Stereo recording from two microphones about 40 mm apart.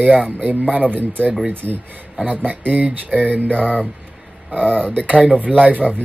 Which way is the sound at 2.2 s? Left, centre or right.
Right.